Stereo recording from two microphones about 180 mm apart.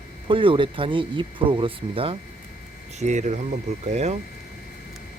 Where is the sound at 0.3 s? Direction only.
30° right (ahead or behind).